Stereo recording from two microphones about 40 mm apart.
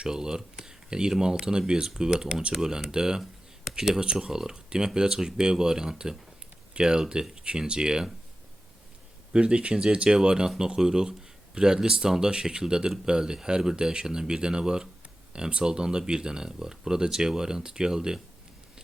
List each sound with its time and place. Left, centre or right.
0.0 s speech: centre
3.2 s a sound: centre
4.2 s speech: centre
9.3 s speech: right